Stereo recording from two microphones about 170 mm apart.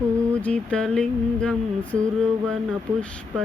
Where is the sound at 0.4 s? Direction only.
5° left (ahead or behind).